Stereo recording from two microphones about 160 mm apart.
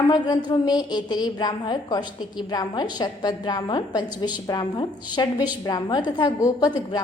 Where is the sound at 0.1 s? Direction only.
25° left (ahead or behind).